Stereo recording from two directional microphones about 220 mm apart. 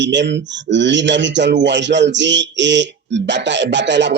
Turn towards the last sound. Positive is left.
turn(degrees=-55)  # may be behind; listen again after turning